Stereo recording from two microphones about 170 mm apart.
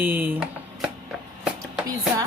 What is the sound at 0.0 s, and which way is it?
Speech, 10° right (ahead or behind).